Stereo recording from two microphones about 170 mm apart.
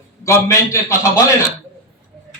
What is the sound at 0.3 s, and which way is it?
Speech, 15° left (ahead or behind).